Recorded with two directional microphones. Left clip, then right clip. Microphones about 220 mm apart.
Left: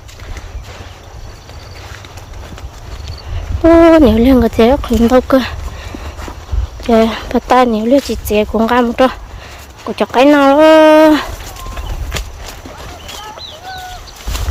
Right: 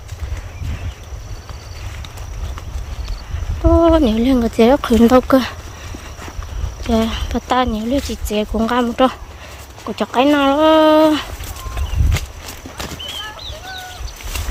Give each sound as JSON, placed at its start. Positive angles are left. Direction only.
{"t": 3.9, "sound": "speech", "side_deg": 15}
{"t": 6.8, "sound": "speech", "side_deg": 15}